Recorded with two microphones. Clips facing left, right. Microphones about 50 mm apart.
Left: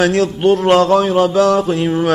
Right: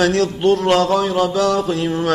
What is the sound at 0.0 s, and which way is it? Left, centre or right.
A man's voice, centre.